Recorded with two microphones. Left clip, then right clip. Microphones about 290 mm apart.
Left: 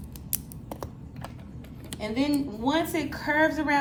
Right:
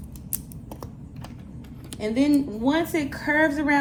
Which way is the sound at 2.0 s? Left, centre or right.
Centre.